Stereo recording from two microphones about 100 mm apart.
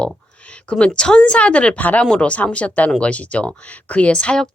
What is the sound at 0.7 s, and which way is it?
Speech, 10° left (ahead or behind).